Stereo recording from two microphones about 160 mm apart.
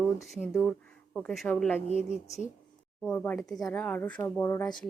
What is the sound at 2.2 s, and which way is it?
Speech, 45° left (ahead or behind).